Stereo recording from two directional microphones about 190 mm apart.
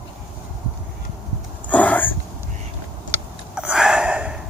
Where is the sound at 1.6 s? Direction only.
10° left (ahead or behind).